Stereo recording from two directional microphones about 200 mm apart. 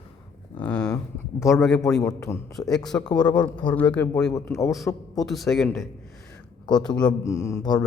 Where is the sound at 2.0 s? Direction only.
15° left (ahead or behind).